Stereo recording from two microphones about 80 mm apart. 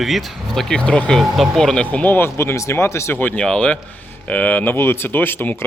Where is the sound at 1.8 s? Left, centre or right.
Centre; by 3.2 s left.